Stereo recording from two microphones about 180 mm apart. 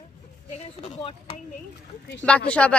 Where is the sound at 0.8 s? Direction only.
30° left (ahead or behind).